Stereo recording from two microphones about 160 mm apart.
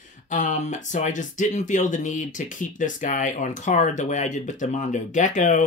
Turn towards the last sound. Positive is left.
turn(degrees=50)  # may be behind; listen again after turning